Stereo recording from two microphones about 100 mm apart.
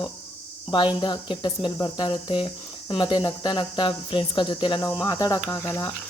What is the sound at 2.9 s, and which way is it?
Speech, 50° left (ahead or behind).